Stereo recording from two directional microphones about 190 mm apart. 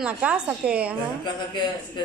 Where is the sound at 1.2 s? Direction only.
25° left (ahead or behind).